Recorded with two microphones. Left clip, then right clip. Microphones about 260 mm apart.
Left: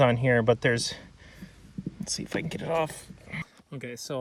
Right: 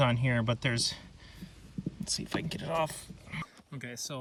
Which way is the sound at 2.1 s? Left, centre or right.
Centre.